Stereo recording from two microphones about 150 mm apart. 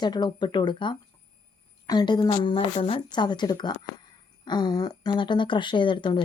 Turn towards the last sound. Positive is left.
turn(degrees=30)  # may be behind; listen again after turning